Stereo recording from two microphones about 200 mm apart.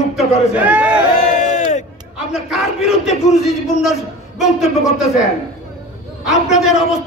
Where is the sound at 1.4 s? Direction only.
35° left (ahead or behind).